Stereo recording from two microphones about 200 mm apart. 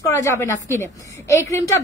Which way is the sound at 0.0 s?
15° left (ahead or behind).